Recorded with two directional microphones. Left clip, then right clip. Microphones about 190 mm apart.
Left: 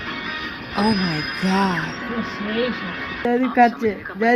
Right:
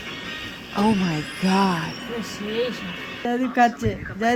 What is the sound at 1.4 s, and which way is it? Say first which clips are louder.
Music: even; centre (ahead or behind).